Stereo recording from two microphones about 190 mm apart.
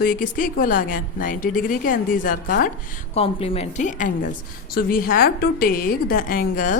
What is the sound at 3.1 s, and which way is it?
A woman's voice, 30° left (ahead or behind).